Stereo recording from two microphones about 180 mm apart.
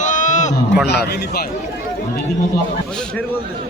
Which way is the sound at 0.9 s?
65° left (ahead or behind).